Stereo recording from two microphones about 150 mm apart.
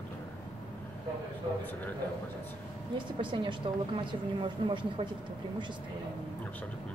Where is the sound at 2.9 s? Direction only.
35° right (ahead or behind).